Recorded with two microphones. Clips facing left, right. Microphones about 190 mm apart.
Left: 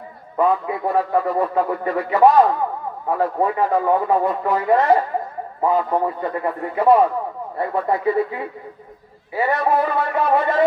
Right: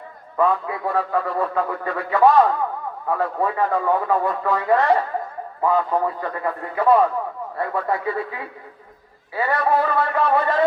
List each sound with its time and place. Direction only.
0.3 s a man's voice: 25° left (ahead or behind)